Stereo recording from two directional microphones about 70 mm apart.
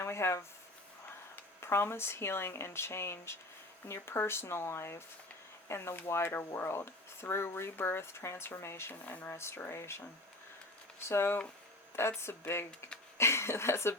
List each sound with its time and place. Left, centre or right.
0.0 s speech: left
9.0 s speech: left
9.3 s speech: left
11.1 s speech: left